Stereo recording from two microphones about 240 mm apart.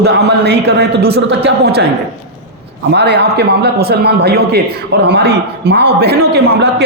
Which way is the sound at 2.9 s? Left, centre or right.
Right.